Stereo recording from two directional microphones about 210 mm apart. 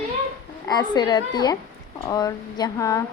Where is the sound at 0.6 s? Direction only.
20° left (ahead or behind).